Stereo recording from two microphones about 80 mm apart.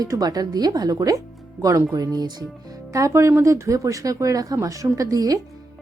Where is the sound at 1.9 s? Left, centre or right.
Right.